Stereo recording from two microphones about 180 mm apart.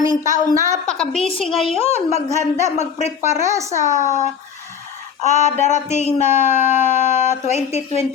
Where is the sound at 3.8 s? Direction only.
40° left (ahead or behind).